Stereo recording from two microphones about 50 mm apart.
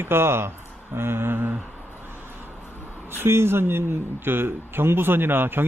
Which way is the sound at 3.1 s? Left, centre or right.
Right.